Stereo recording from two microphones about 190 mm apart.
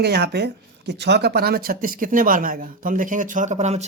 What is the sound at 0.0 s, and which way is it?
Speech, 60° right (ahead or behind).